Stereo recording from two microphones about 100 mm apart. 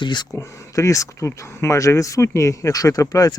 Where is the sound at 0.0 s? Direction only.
50° left (ahead or behind).